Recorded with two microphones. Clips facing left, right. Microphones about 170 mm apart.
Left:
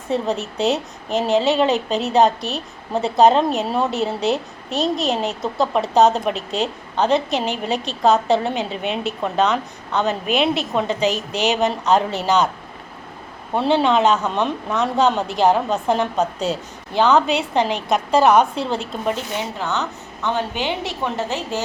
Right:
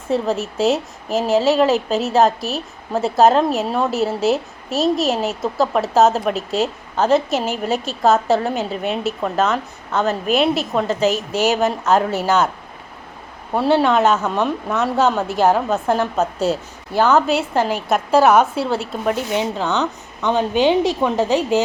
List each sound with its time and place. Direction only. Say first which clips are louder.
0.1 s a woman's voice: right 2 dB; centre (ahead or behind)
13.5 s a woman's voice: right 1 dB; 5° right (ahead or behind)
19.4 s a woman's voice: right 4 dB; 20° right (ahead or behind)